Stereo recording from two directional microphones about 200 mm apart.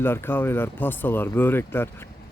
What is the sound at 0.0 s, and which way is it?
Speech, 10° left (ahead or behind).